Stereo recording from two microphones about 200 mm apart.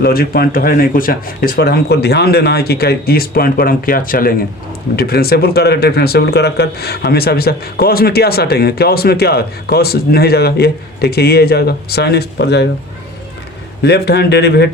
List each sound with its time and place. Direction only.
0.0 s speech: 50° left (ahead or behind)
13.8 s speech: 55° left (ahead or behind)